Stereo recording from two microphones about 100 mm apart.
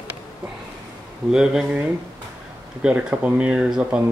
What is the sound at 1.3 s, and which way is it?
Speech, 5° right (ahead or behind).